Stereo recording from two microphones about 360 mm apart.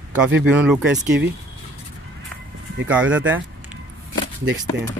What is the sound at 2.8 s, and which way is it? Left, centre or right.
Speech, centre.